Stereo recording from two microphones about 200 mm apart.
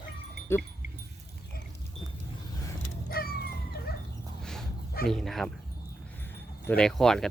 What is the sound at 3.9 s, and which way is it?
Dog, 50° left (ahead or behind).